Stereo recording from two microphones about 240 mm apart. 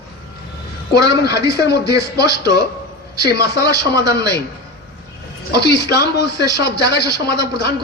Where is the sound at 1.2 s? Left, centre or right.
Left.